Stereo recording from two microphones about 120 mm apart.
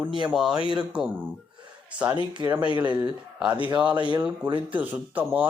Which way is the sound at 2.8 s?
15° right (ahead or behind).